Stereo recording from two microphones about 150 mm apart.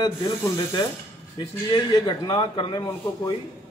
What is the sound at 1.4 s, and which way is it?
A man's voice, 30° left (ahead or behind).